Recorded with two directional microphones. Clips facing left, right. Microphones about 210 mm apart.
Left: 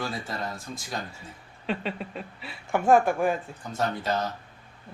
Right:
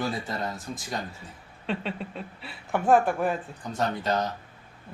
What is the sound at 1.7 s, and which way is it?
Speech, centre (ahead or behind).